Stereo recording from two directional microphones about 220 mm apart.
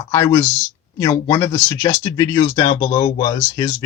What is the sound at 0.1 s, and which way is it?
Speech, 15° left (ahead or behind).